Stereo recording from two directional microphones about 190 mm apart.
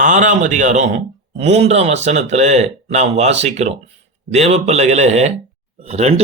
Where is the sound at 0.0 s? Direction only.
40° right (ahead or behind).